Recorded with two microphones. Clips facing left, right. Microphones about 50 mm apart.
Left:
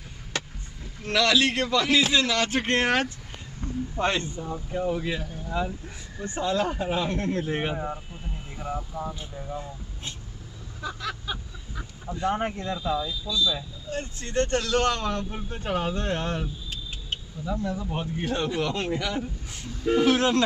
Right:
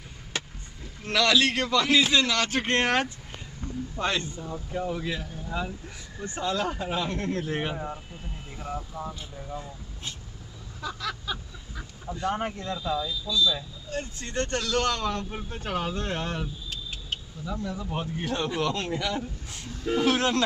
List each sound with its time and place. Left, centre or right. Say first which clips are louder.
1.0 s speech: left 1 dB; centre
3.9 s speech: left 2 dB; left
4.4 s speech: left 2 dB; centre
10.8 s a sound: even; centre
12.7 s speech: left 1 dB; centre
14.2 s speech: left 6 dB; centre
14.5 s a man's voice: left 1 dB; centre
15.5 s speech: left 3 dB; centre